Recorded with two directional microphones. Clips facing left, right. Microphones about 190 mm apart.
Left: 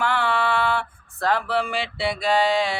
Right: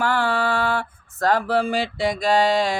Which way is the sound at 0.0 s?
40° right (ahead or behind).